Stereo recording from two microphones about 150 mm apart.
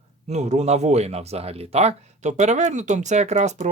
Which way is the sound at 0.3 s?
50° right (ahead or behind).